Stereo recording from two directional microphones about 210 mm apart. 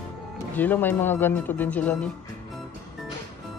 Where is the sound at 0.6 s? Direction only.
10° left (ahead or behind).